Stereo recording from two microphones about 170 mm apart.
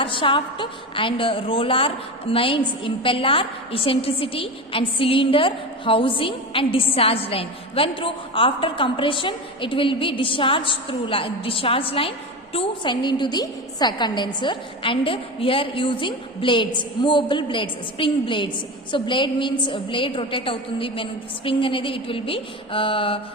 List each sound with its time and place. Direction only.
0.0 s a woman's voice: 30° left (ahead or behind)